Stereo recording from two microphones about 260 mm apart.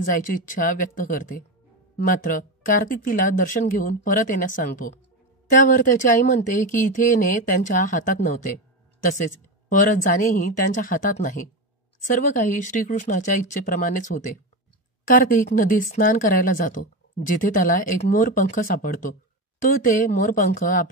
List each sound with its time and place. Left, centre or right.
0.0 s speech: left
9.7 s speech: left